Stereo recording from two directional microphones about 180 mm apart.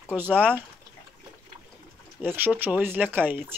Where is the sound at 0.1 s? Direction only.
10° right (ahead or behind).